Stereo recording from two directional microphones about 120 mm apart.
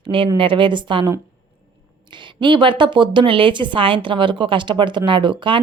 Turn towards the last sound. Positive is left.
turn(degrees=-45)  # may be behind; listen again after turning